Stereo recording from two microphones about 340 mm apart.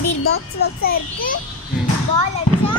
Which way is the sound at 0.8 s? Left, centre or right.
Left.